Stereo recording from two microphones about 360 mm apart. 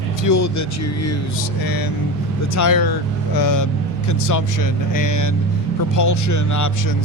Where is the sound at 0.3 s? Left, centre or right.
Left.